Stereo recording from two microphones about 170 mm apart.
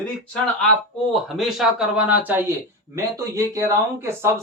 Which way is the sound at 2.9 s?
20° right (ahead or behind).